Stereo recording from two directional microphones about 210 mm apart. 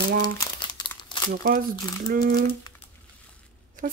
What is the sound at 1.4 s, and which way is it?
Speech, 45° right (ahead or behind).